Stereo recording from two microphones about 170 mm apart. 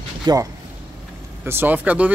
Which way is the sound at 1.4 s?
10° right (ahead or behind).